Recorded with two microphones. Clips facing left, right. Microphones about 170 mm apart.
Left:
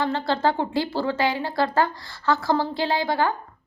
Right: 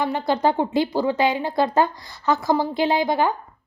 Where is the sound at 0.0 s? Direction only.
15° right (ahead or behind).